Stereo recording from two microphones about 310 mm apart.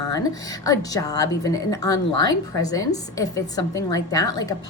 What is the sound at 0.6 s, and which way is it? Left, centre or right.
Speech, centre.